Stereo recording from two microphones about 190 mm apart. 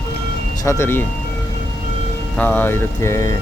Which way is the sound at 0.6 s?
15° left (ahead or behind).